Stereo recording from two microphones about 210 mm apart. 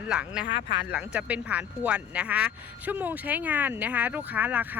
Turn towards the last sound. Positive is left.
turn(degrees=-10)  # may be behind; listen again after turning